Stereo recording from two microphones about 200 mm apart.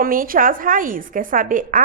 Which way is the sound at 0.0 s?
45° right (ahead or behind).